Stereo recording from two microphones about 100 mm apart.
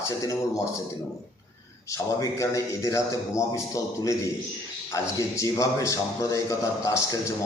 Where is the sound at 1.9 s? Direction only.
30° left (ahead or behind).